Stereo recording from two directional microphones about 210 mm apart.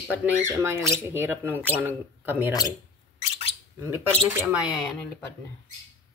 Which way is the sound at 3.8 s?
10° right (ahead or behind).